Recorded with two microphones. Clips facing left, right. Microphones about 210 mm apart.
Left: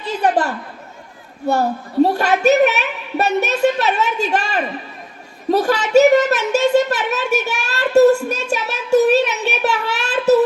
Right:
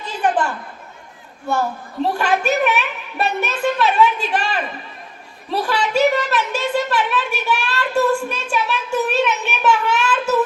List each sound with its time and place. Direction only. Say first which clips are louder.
0.2 s chatter: left 1 dB; 40° left (ahead or behind)
1.5 s speech: left 4 dB; 40° left (ahead or behind)